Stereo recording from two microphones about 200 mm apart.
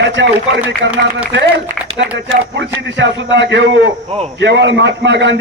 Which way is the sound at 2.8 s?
65° right (ahead or behind).